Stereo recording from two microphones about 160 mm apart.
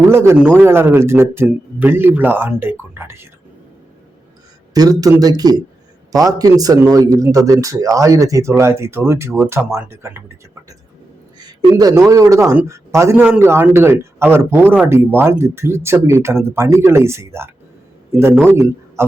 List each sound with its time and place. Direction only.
0.1 s a man's voice: 15° right (ahead or behind)
4.7 s a man's voice: 25° right (ahead or behind)